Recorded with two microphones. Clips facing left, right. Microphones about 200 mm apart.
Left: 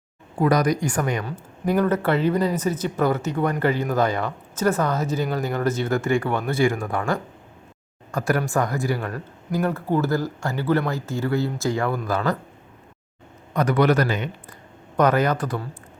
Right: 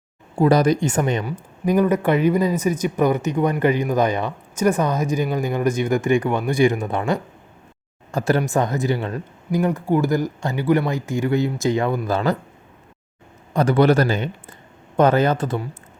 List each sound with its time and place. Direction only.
0.3 s speech: 30° right (ahead or behind)
13.5 s speech: 30° right (ahead or behind)